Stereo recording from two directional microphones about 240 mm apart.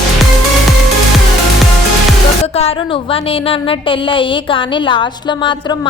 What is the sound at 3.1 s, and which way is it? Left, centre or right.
A woman's voice, left.